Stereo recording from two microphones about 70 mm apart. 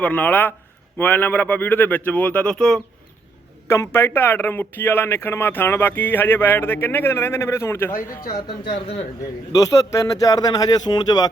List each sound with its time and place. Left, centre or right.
0.0 s speech: left
3.7 s speech: left
9.5 s speech: left